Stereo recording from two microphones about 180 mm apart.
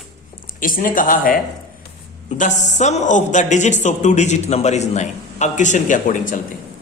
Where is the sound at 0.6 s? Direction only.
50° left (ahead or behind).